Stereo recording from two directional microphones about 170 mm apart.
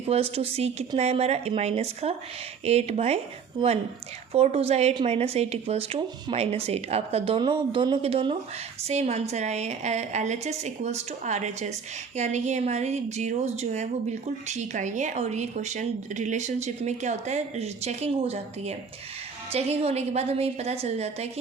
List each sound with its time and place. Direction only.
0.1 s a woman's voice: 35° right (ahead or behind)
4.3 s a woman's voice: 35° right (ahead or behind)